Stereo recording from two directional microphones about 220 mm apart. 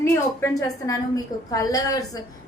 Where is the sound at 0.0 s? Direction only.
10° left (ahead or behind).